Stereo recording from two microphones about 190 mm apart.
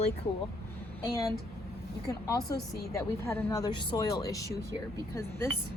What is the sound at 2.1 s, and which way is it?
Speech, 20° left (ahead or behind).